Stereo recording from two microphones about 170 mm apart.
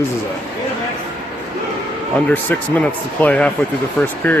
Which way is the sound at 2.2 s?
10° left (ahead or behind).